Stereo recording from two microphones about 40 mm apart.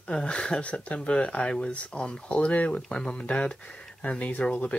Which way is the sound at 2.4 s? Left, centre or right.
Left.